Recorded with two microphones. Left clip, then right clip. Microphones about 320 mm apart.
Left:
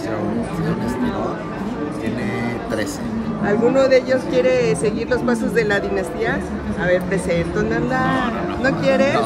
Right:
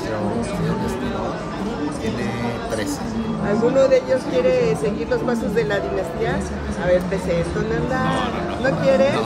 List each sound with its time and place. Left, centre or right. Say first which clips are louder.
3.4 s speech: left 1 dB; left